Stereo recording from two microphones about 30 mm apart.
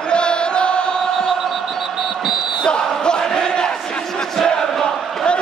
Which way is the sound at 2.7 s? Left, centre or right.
Left.